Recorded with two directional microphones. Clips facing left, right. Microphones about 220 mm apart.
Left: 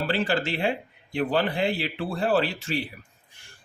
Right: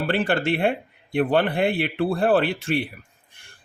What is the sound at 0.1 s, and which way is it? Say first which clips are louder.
Speech: right 6 dB; 55° right (ahead or behind).